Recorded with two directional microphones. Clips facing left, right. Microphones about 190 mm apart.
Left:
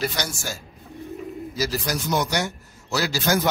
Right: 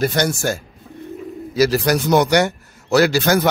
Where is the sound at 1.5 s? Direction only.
70° right (ahead or behind).